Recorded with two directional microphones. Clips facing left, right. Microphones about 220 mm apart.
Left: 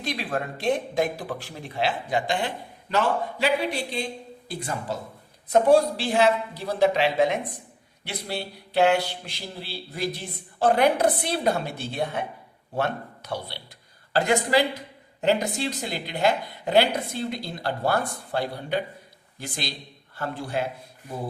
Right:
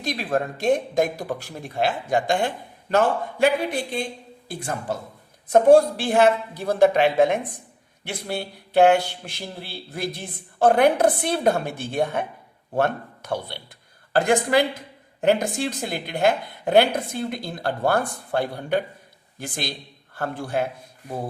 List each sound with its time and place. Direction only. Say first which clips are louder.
0.0 s speech: right 4 dB; 45° right (ahead or behind)